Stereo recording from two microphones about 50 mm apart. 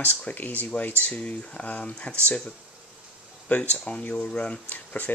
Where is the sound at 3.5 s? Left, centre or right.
Left.